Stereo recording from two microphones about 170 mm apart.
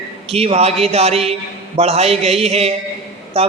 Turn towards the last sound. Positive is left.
turn(degrees=-35)  # may be behind; listen again after turning